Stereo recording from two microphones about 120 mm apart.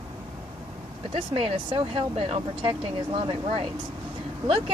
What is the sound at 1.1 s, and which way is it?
Speech, 45° right (ahead or behind).